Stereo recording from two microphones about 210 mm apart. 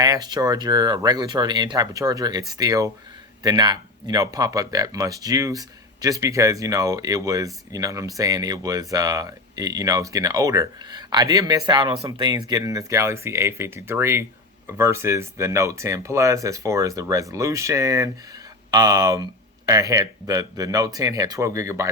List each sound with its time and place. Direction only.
0.0 s speech: 20° right (ahead or behind)